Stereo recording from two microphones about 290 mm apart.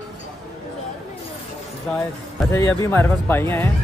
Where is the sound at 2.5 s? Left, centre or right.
Centre.